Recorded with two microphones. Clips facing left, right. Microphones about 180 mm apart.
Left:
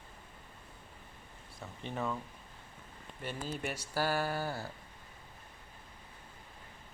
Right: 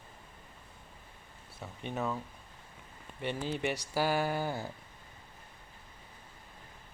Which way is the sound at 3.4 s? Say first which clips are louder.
Right 4 dB; centre (ahead or behind).